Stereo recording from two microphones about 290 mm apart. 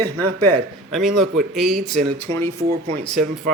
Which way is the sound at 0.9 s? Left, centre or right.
Centre.